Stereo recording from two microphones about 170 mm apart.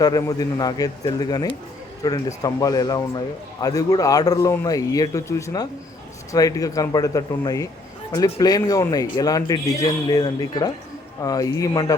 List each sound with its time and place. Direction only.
0.0 s a man's voice: 20° left (ahead or behind)